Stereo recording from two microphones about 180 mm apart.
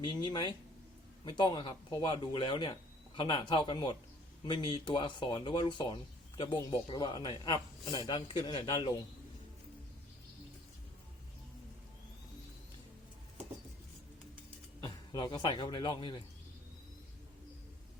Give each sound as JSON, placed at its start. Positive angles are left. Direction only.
{"t": 0.0, "sound": "speech", "side_deg": 25}
{"t": 14.8, "sound": "a man's voice", "side_deg": 25}